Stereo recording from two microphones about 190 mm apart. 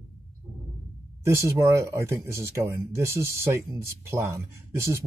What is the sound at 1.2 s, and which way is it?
Speech, 15° right (ahead or behind).